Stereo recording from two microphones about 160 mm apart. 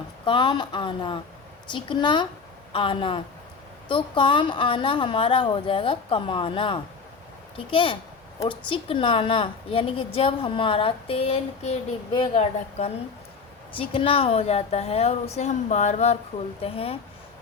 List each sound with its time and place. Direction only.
0.3 s a woman's voice: 30° left (ahead or behind)